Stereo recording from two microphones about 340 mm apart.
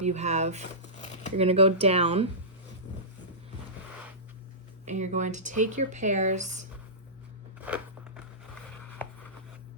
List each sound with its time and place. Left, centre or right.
0.0 s speech: centre
1.0 s a sound: left
1.4 s speech: centre
4.9 s speech: right
7.6 s crunch: centre